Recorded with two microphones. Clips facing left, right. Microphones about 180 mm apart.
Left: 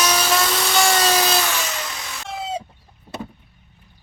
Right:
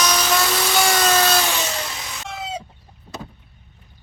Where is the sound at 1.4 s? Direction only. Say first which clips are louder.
Right 1 dB; 20° right (ahead or behind).